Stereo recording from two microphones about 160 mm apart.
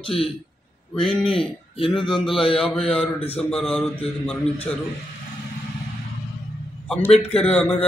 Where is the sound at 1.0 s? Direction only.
Centre (ahead or behind).